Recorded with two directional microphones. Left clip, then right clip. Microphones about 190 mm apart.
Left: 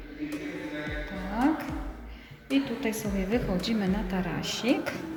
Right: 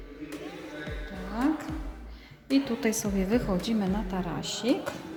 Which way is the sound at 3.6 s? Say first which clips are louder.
Left 1 dB; 15° right (ahead or behind).